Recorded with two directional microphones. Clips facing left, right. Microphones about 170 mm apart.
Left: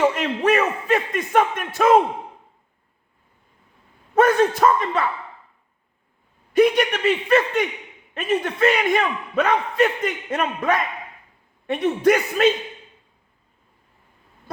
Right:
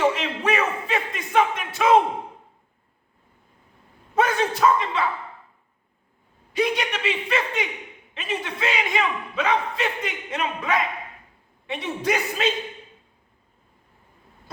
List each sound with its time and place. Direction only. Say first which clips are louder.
0.1 s speech: left 5 dB; 45° left (ahead or behind)
4.1 s a man's voice: left 6 dB; 50° left (ahead or behind)
6.5 s a man's voice: left 7 dB; 55° left (ahead or behind)